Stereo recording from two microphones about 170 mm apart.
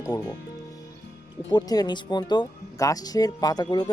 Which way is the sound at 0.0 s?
25° left (ahead or behind).